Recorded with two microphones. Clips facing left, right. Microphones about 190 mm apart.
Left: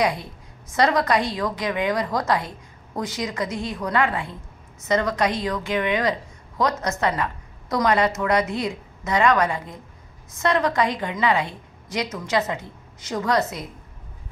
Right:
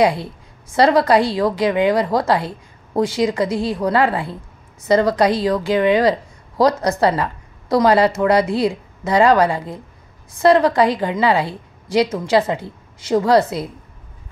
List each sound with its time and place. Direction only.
0.0 s a woman's voice: 30° right (ahead or behind)